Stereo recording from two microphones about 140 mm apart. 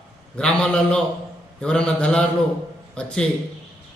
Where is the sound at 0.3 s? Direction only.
5° left (ahead or behind).